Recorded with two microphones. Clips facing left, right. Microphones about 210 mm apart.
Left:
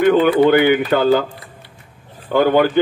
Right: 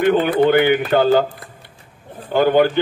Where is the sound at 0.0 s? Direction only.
50° left (ahead or behind).